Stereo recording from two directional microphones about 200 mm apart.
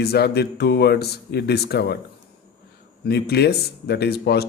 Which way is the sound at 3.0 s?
55° left (ahead or behind).